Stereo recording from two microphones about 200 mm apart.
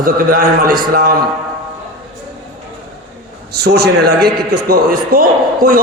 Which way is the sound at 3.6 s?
55° right (ahead or behind).